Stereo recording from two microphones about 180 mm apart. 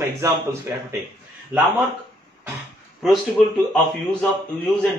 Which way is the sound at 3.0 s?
Centre (ahead or behind).